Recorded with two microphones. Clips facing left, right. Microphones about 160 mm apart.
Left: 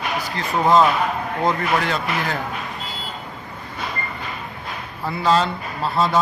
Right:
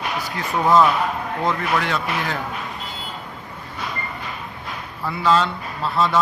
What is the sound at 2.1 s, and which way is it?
Speech, centre (ahead or behind).